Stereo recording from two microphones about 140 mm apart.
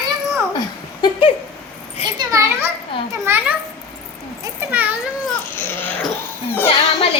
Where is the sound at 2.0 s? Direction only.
45° left (ahead or behind).